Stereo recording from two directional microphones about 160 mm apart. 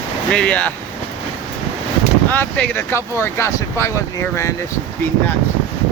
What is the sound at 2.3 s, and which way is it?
Speech, 10° left (ahead or behind).